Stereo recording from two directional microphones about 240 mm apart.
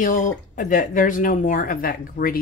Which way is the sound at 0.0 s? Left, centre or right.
Left.